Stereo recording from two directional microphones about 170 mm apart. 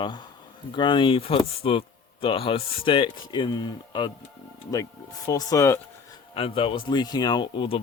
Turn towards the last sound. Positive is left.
turn(degrees=30)  # may be behind; listen again after turning